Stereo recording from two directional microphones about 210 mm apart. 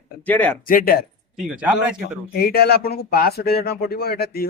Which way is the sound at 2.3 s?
50° left (ahead or behind).